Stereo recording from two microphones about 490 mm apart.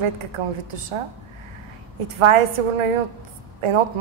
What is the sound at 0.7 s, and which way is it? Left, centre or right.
Speech, right.